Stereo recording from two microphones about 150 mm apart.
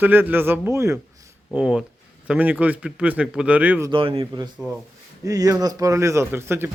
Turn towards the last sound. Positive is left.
turn(degrees=-15)  # may be behind; listen again after turning